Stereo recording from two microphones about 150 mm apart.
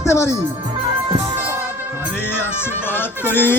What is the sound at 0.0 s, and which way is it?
Music, 20° left (ahead or behind).